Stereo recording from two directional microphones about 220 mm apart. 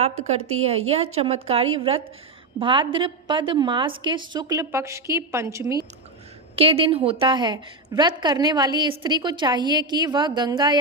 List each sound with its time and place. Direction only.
0.0 s a woman's voice: 30° right (ahead or behind); by 5.8 s 15° right (ahead or behind)
6.6 s a woman's voice: 25° right (ahead or behind)